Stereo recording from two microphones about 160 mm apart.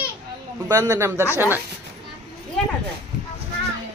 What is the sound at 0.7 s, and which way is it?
Speech, 20° right (ahead or behind).